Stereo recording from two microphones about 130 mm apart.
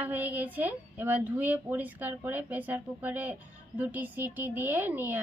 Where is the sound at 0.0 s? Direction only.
15° right (ahead or behind).